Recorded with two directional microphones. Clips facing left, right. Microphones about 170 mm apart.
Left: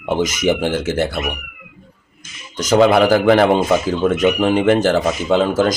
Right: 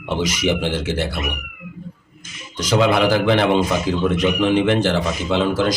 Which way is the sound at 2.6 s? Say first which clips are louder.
Left 4 dB; 45° left (ahead or behind).